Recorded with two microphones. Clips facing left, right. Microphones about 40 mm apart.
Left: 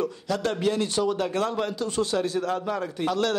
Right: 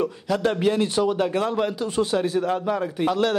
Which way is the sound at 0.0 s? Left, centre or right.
Centre.